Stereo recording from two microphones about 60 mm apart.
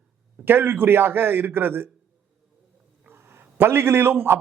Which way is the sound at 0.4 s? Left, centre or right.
Right.